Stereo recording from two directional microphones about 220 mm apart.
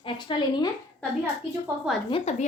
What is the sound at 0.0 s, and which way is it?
Speech, 20° left (ahead or behind).